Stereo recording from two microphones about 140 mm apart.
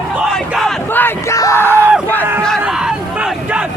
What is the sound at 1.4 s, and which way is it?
Yell, 20° left (ahead or behind).